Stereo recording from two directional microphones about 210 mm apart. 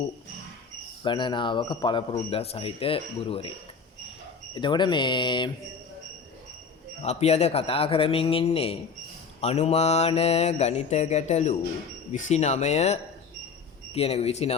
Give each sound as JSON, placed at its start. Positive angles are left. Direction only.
{"t": 1.0, "sound": "a man's voice", "side_deg": 20}
{"t": 4.5, "sound": "a man's voice", "side_deg": 20}
{"t": 7.0, "sound": "a man's voice", "side_deg": 30}
{"t": 9.4, "sound": "mantra", "side_deg": 30}
{"t": 13.9, "sound": "a man's voice", "side_deg": 30}